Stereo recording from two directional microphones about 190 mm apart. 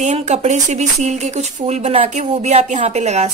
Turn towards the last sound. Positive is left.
turn(degrees=-35)  # may be behind; listen again after turning